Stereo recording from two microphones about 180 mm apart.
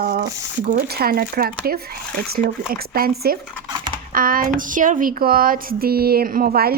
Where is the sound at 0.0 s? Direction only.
55° right (ahead or behind).